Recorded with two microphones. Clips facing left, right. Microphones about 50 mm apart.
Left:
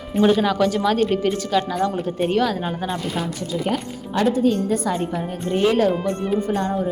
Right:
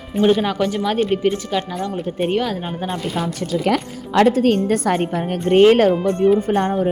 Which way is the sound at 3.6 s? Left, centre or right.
Right.